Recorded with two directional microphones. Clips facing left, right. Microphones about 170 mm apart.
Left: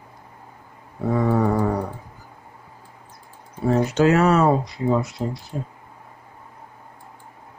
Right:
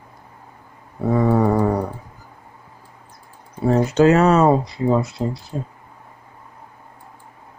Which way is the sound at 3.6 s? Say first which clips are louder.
Right 3 dB; 35° right (ahead or behind).